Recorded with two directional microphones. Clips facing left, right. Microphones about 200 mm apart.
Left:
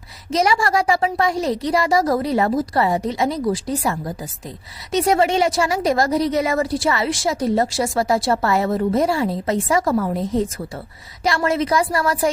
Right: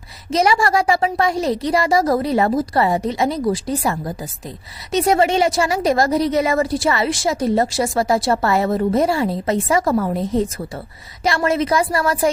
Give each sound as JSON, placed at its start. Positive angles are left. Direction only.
{"t": 0.3, "sound": "a woman's voice", "side_deg": -25}